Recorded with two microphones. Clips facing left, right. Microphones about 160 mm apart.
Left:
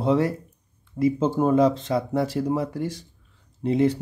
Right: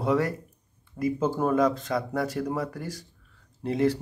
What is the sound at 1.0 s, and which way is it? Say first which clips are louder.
Speech: left 4 dB; 25° left (ahead or behind).